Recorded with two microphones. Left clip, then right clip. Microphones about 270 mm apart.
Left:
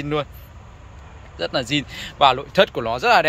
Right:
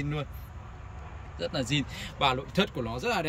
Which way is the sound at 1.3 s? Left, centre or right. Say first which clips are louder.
Left 8 dB; centre.